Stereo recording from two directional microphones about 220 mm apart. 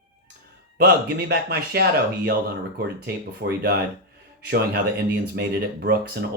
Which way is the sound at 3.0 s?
45° right (ahead or behind).